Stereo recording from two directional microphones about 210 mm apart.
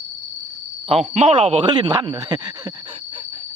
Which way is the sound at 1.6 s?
20° right (ahead or behind).